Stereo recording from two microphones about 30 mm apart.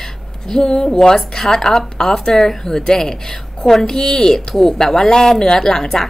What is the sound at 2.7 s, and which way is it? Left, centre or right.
Speech, left.